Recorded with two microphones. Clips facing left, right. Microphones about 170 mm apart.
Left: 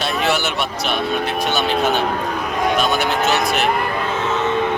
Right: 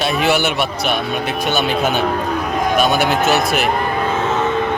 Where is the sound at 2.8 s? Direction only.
5° right (ahead or behind).